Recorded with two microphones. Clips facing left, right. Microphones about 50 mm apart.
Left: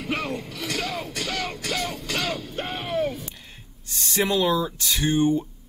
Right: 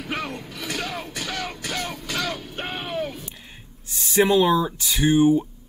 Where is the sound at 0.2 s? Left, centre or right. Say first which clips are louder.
Left 1 dB; left.